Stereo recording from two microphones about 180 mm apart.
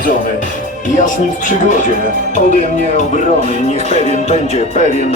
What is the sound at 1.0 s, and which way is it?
Speech, 45° left (ahead or behind).